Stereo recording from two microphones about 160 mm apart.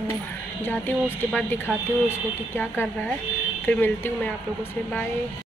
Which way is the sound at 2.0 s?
15° left (ahead or behind).